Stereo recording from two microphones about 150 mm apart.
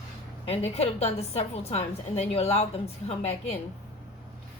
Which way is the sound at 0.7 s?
45° left (ahead or behind).